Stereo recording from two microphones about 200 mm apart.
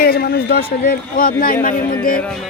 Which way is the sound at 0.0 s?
50° left (ahead or behind).